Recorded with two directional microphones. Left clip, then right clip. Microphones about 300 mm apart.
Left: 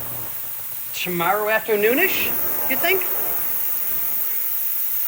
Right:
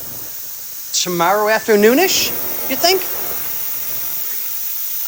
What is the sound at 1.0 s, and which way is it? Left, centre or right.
Speech, centre.